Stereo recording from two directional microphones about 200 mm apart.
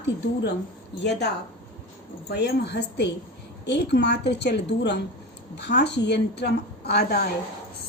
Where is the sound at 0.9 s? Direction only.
60° left (ahead or behind).